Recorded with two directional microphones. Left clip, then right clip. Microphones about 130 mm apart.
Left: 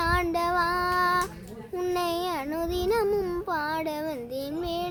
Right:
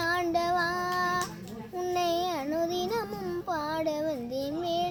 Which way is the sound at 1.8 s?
25° left (ahead or behind).